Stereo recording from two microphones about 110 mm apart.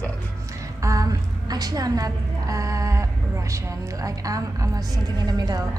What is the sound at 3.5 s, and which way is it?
A woman's voice, 30° right (ahead or behind).